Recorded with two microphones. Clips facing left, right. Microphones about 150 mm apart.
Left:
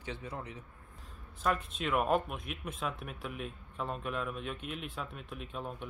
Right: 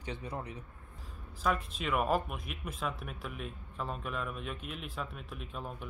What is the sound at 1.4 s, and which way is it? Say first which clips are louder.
Speech: even; centre (ahead or behind).